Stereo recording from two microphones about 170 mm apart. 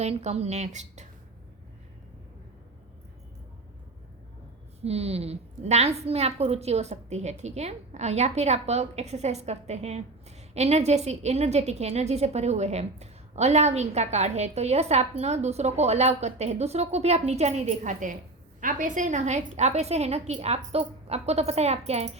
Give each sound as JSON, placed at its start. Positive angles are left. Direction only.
{"t": 0.0, "sound": "a woman's voice", "side_deg": -40}
{"t": 4.8, "sound": "a woman's voice", "side_deg": -35}